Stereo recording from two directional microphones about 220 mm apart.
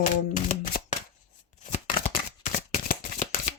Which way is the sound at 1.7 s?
30° left (ahead or behind).